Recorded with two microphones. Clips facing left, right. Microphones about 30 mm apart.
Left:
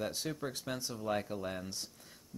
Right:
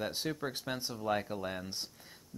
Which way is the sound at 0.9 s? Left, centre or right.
Centre.